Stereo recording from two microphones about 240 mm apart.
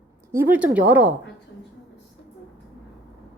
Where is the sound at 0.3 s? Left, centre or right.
Centre.